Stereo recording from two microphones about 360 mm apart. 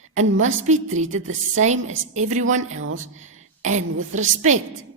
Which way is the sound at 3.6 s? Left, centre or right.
Centre.